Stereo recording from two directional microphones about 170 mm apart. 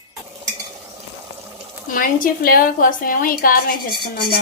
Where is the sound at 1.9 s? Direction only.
55° left (ahead or behind).